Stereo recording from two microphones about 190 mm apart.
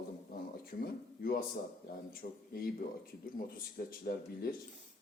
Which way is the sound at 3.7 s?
50° left (ahead or behind).